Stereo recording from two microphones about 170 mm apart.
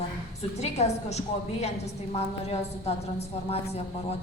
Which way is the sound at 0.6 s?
40° left (ahead or behind).